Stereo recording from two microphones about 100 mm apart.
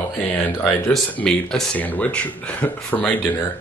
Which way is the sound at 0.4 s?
10° left (ahead or behind).